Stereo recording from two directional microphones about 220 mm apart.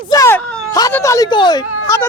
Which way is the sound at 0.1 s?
15° left (ahead or behind).